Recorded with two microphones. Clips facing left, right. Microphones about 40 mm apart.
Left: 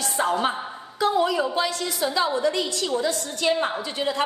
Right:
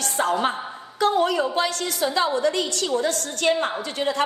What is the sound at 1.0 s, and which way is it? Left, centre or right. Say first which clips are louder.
A woman's voice: right 1 dB; right.